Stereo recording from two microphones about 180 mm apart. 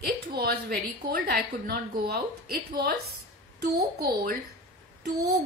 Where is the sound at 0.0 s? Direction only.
60° right (ahead or behind).